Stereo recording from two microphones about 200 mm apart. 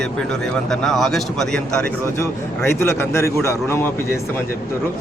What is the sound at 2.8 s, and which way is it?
A man's voice, 15° left (ahead or behind).